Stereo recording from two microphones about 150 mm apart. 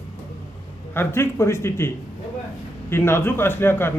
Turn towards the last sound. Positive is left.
turn(degrees=15)  # may be behind; listen again after turning